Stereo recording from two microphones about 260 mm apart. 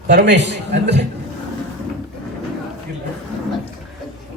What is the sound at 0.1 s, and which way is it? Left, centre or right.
Speech, right.